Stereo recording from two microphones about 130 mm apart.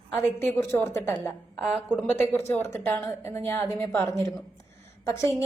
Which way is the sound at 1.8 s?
10° right (ahead or behind).